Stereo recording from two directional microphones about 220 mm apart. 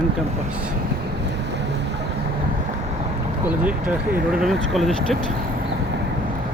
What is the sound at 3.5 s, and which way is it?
Speech, 5° right (ahead or behind).